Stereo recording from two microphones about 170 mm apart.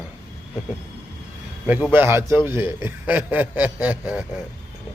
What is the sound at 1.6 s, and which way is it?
A man's voice, 10° right (ahead or behind).